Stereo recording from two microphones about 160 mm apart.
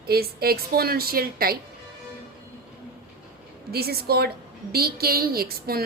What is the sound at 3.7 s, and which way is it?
A woman's voice, 75° right (ahead or behind).